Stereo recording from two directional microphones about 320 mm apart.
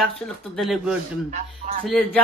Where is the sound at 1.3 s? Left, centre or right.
Right.